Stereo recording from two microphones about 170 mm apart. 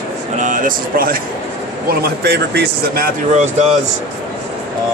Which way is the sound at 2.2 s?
75° right (ahead or behind).